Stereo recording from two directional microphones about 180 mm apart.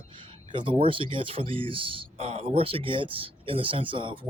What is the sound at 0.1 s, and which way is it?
Speech, 30° right (ahead or behind).